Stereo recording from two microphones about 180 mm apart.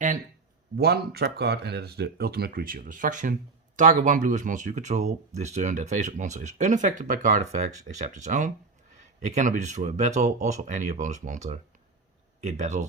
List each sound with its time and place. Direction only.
0.8 s speech: 60° right (ahead or behind); by 12.9 s 40° right (ahead or behind)